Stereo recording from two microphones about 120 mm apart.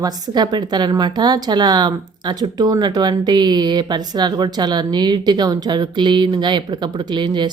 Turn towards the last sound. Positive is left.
turn(degrees=-40)  # may be behind; listen again after turning